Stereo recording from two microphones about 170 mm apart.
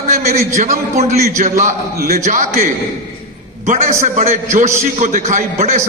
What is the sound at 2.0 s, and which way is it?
Speech, 65° right (ahead or behind).